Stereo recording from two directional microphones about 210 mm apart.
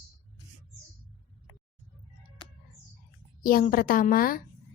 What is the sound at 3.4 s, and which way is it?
Speech, 40° left (ahead or behind).